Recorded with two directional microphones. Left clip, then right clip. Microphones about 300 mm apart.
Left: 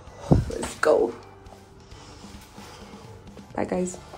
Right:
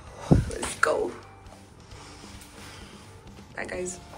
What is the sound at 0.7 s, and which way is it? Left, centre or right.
Speech, centre.